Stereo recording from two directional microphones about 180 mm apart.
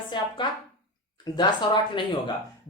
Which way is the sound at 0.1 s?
25° left (ahead or behind).